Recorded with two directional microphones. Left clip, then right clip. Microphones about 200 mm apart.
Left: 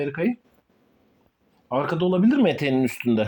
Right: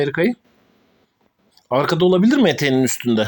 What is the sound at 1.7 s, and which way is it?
Speech, 20° right (ahead or behind).